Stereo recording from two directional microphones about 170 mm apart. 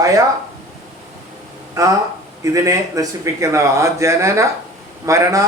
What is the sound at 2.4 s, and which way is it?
A man's voice, 20° right (ahead or behind).